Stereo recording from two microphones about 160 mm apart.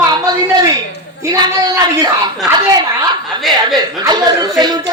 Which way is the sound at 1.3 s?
25° right (ahead or behind).